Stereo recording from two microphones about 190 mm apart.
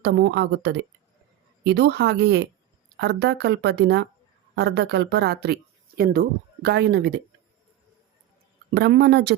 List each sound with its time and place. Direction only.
0.0 s speech: 65° right (ahead or behind)
8.7 s speech: 60° right (ahead or behind)